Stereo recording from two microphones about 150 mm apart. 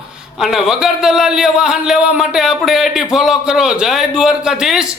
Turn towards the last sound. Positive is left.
turn(degrees=-5)  # may be behind; listen again after turning